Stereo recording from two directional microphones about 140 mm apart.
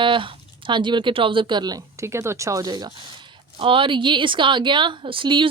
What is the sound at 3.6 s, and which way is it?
A woman's voice, 40° right (ahead or behind).